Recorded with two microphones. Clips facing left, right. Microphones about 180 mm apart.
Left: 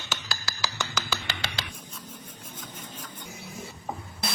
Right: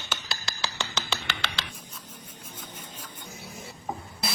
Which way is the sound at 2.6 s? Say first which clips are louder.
Left 2 dB; 10° right (ahead or behind).